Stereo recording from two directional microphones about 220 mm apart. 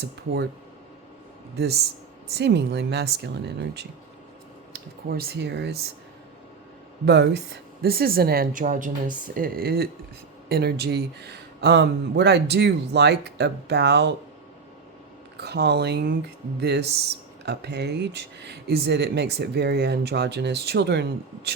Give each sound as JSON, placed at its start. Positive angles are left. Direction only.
{"t": 1.5, "sound": "speech", "side_deg": -45}
{"t": 5.0, "sound": "speech", "side_deg": -45}
{"t": 7.0, "sound": "speech", "side_deg": -50}
{"t": 15.4, "sound": "speech", "side_deg": -50}